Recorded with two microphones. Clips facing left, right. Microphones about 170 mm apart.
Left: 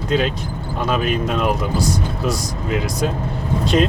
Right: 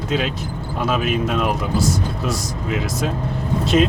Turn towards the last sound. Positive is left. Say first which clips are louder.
# even
turn(degrees=0)  # may be behind; listen again after turning